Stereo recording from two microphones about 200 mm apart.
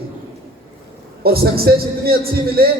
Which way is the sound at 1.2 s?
50° right (ahead or behind).